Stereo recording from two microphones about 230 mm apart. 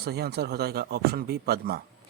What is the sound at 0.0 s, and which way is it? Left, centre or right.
Speech, right.